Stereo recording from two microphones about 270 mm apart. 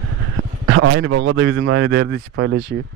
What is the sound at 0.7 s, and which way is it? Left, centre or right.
Speech, right.